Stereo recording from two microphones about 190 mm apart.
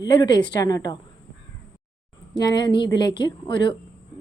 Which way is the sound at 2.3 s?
25° left (ahead or behind).